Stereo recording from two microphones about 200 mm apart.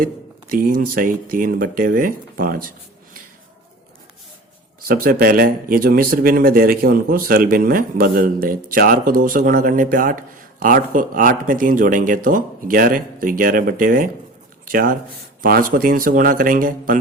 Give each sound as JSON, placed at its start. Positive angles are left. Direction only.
{"t": 0.0, "sound": "speech", "side_deg": -45}
{"t": 4.9, "sound": "speech", "side_deg": -45}
{"t": 14.6, "sound": "a sound", "side_deg": -45}
{"t": 15.4, "sound": "speech", "side_deg": -45}